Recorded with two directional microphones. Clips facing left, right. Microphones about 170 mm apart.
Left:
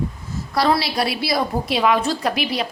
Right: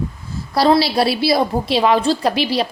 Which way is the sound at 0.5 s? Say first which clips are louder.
Right 5 dB; 30° right (ahead or behind).